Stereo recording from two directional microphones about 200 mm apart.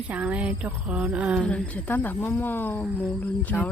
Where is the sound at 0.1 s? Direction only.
5° right (ahead or behind).